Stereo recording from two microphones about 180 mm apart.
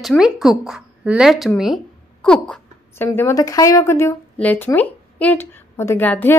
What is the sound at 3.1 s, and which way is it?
A woman's voice, 15° left (ahead or behind).